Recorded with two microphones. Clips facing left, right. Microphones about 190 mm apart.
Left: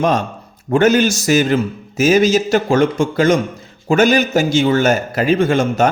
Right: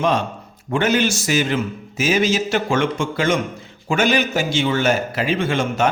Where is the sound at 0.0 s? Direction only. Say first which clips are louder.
Left 3 dB; 45° left (ahead or behind).